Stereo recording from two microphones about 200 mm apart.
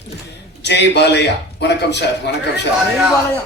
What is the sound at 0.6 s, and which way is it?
A man's voice, 60° left (ahead or behind).